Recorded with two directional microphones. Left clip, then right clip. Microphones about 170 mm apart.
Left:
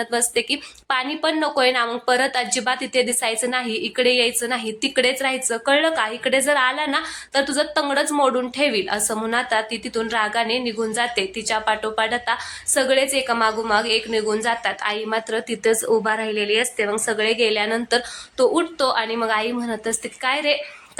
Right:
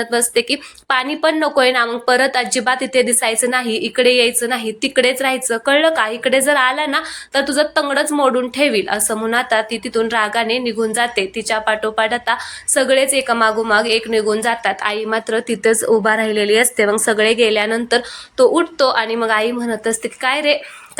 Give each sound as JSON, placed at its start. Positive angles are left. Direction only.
{"t": 0.0, "sound": "a woman's voice", "side_deg": -20}